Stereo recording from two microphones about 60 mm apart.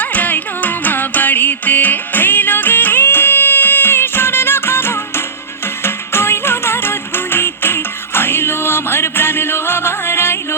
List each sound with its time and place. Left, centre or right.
0.0 s music: left